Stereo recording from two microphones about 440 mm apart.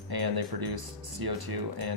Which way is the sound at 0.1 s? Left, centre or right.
Right.